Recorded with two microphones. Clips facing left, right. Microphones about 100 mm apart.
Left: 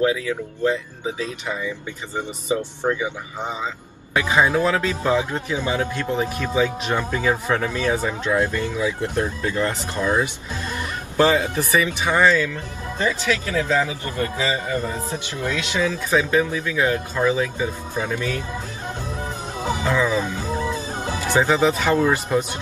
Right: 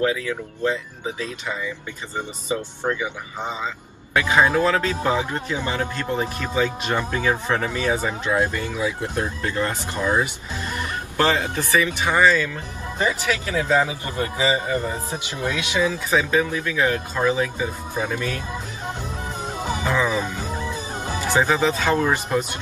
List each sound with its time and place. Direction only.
0.7 s speech: 20° left (ahead or behind)
7.6 s speech: 15° right (ahead or behind)
11.1 s speech: 15° left (ahead or behind)
12.1 s speech: 10° right (ahead or behind)
16.4 s speech: 15° left (ahead or behind)
17.1 s speech: 15° right (ahead or behind)
19.8 s music: 15° right (ahead or behind)
21.4 s speech: 15° left (ahead or behind)